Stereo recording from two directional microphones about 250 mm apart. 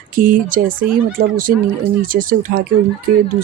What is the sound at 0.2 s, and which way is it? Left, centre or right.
Speech, right.